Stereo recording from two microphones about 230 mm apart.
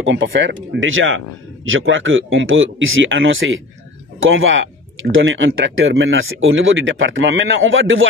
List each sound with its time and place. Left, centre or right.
0.0 s speech: right